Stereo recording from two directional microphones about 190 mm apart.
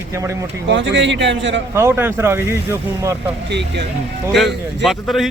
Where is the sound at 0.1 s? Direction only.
15° right (ahead or behind).